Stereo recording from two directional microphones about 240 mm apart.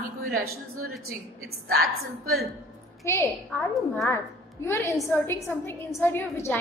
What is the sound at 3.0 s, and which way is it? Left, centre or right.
Speech, centre.